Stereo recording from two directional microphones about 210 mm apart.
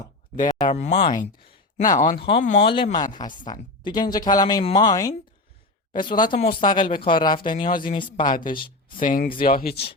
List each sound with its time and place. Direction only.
0.3 s speech: 35° left (ahead or behind)
1.2 s a sound: 35° left (ahead or behind)
2.0 s speech: 40° left (ahead or behind); by 6.3 s 20° left (ahead or behind)
6.3 s speech: 45° left (ahead or behind)
6.7 s speech: 25° left (ahead or behind)
7.5 s speech: 40° left (ahead or behind)
7.9 s speech: 25° left (ahead or behind)
9.0 s speech: 40° left (ahead or behind)